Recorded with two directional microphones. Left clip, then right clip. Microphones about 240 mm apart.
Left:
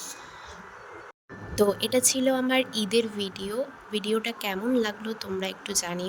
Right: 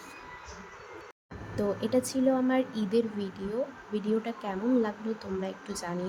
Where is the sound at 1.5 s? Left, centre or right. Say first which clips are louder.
Left 5 dB; left.